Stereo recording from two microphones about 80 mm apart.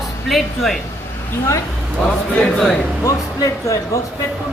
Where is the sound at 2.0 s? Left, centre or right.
Centre.